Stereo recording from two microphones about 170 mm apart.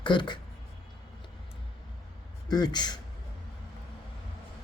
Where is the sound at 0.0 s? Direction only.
25° left (ahead or behind).